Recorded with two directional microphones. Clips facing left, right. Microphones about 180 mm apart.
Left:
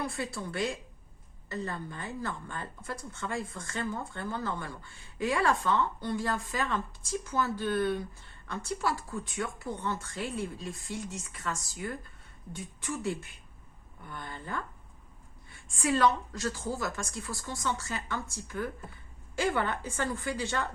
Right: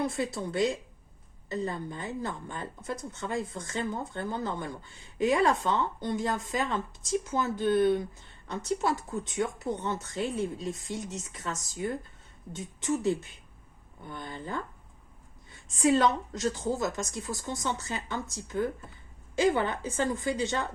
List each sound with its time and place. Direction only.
0.0 s a woman's voice: 20° right (ahead or behind)